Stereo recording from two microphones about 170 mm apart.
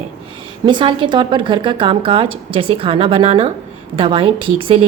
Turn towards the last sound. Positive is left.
turn(degrees=-30)  # may be behind; listen again after turning